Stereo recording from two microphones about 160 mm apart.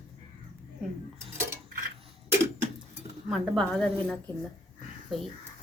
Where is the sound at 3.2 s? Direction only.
Centre (ahead or behind).